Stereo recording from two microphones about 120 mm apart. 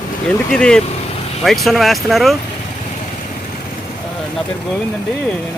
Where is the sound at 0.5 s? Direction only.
5° left (ahead or behind).